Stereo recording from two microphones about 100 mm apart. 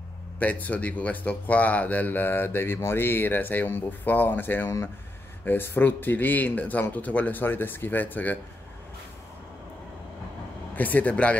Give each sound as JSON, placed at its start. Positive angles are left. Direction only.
{"t": 0.4, "sound": "speech", "side_deg": 15}
{"t": 10.8, "sound": "speech", "side_deg": 15}